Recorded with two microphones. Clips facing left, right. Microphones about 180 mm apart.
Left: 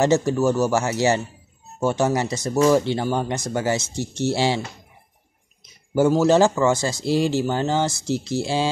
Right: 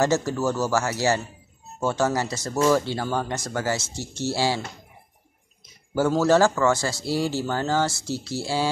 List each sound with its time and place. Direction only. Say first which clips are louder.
0.0 s speech: left 4 dB; 20° left (ahead or behind)
5.9 s speech: left 3 dB; 15° left (ahead or behind)